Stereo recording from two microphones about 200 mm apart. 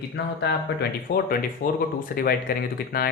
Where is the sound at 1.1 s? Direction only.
55° left (ahead or behind).